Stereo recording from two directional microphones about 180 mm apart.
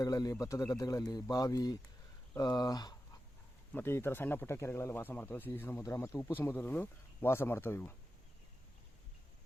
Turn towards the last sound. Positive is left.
turn(degrees=10)  # may be behind; listen again after turning